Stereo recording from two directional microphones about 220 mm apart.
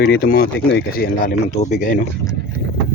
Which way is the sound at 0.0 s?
45° left (ahead or behind).